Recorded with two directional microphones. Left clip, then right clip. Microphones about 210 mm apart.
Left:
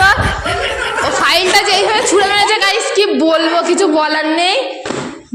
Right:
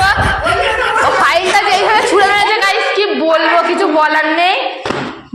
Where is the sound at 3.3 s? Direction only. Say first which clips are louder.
Right 2 dB; 45° left (ahead or behind).